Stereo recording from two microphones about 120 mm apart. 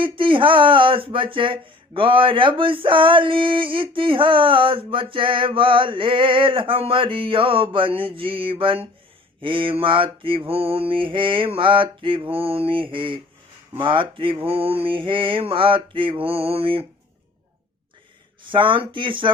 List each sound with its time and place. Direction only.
0.0 s speech: 45° right (ahead or behind)
18.4 s speech: 45° right (ahead or behind)